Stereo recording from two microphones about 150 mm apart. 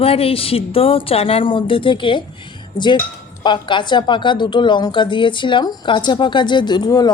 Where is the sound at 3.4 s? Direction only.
30° left (ahead or behind).